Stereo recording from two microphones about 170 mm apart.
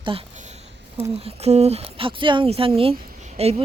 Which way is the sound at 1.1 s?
35° right (ahead or behind).